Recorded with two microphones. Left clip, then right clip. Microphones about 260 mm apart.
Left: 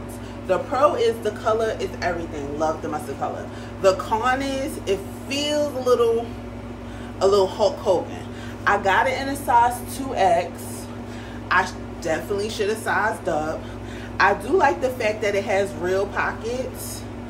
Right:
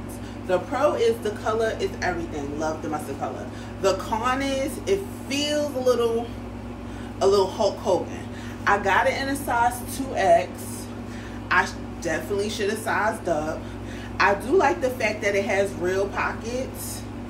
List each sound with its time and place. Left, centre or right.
0.5 s a woman's voice: centre
3.8 s a woman's voice: centre
7.2 s a woman's voice: centre
11.4 s a woman's voice: centre
14.1 s a woman's voice: centre